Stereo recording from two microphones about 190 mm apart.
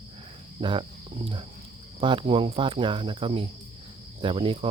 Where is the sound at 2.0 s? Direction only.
25° right (ahead or behind).